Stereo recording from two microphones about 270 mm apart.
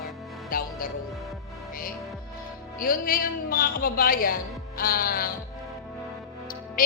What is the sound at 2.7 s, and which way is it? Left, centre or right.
Music, left.